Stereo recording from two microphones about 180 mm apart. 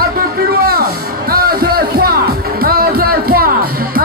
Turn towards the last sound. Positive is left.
turn(degrees=-55)  # may be behind; listen again after turning